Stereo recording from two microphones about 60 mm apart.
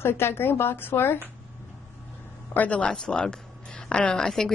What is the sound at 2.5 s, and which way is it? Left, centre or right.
A woman's voice, left.